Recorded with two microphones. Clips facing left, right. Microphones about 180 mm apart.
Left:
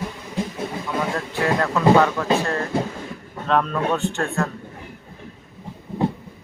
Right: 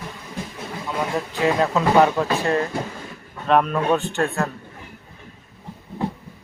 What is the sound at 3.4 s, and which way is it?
Speech, 15° right (ahead or behind).